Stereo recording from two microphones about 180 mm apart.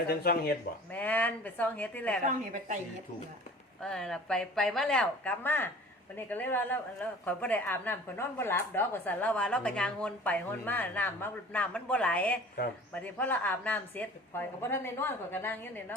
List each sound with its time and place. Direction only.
0.1 s speech: 60° left (ahead or behind)
0.9 s a woman's voice: 10° left (ahead or behind)
2.2 s a woman's voice: 45° right (ahead or behind)
3.8 s a woman's voice: 5° left (ahead or behind)